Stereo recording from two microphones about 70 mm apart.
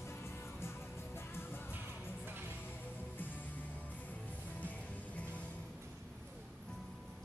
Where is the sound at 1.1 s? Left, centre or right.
Left.